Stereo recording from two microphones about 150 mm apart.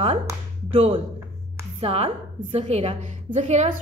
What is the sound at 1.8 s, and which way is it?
A woman's voice, 40° right (ahead or behind).